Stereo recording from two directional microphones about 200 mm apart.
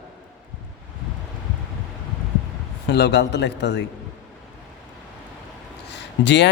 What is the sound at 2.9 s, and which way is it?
Speech, 55° left (ahead or behind).